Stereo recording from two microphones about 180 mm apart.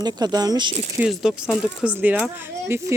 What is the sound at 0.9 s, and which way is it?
Speech, 5° right (ahead or behind).